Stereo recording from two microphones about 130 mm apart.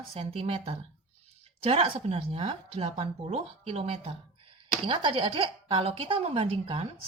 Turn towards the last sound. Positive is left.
turn(degrees=-45)  # may be behind; listen again after turning